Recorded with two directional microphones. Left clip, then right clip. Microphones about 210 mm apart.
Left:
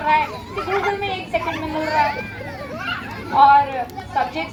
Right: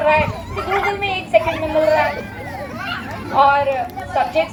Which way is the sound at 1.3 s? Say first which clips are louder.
Right 9 dB; 25° right (ahead or behind).